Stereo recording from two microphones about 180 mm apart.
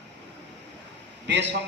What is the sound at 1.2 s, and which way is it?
Speech, 80° right.